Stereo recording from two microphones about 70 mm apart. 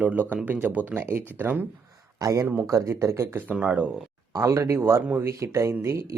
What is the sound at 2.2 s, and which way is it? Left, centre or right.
Speech, right.